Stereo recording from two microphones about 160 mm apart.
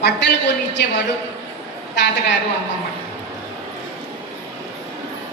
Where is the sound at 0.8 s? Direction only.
90° left.